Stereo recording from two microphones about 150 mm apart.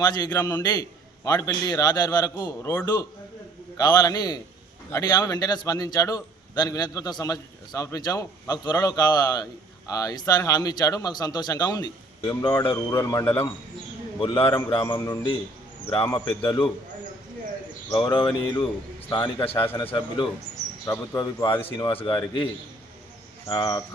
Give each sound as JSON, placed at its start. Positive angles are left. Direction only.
{"t": 0.0, "sound": "a man's voice", "side_deg": 25}
{"t": 14.2, "sound": "a man's voice", "side_deg": 35}
{"t": 17.9, "sound": "a man's voice", "side_deg": 30}
{"t": 20.8, "sound": "a man's voice", "side_deg": 20}
{"t": 22.0, "sound": "a man's voice", "side_deg": 35}
{"t": 23.5, "sound": "a man's voice", "side_deg": 25}